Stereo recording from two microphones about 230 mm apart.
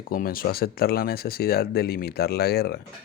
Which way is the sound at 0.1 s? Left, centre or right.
Left.